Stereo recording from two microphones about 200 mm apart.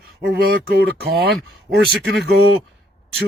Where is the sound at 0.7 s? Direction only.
55° right (ahead or behind).